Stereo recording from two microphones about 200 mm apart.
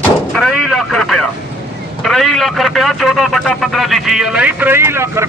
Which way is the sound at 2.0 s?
Centre (ahead or behind).